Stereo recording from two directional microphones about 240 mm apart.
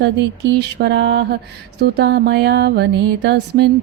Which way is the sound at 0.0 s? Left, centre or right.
Right.